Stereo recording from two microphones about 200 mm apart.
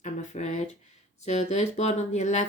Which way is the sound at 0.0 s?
35° left (ahead or behind).